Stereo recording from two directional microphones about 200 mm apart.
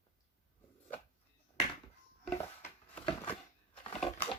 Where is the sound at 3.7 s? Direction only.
30° left (ahead or behind).